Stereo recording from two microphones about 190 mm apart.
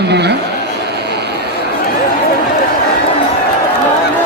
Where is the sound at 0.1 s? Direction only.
60° right (ahead or behind).